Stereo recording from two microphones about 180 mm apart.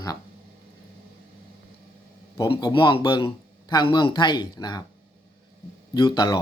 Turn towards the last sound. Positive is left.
turn(degrees=25)  # may be behind; listen again after turning